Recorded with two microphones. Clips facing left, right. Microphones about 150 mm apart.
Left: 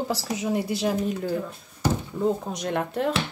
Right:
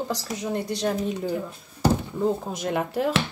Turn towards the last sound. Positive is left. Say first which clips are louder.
# right 1 dB
turn(degrees=0)  # may be behind; listen again after turning